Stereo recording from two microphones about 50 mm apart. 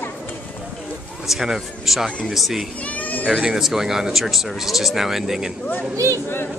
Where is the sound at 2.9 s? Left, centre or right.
Left.